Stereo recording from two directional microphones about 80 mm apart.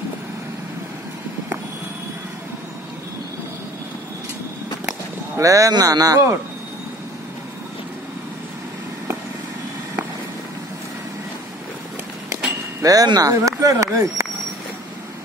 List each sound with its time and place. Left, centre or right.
5.4 s speech: right
12.8 s speech: right